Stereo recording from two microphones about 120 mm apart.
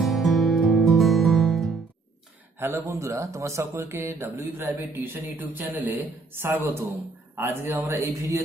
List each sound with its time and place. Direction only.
0.0 s music: centre (ahead or behind)
2.6 s speech: 20° right (ahead or behind)